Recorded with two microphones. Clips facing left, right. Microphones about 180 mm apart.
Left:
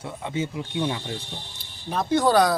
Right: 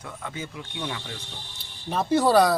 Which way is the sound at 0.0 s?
20° left (ahead or behind).